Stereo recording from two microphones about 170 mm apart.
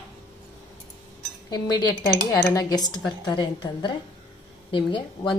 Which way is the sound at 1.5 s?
25° left (ahead or behind).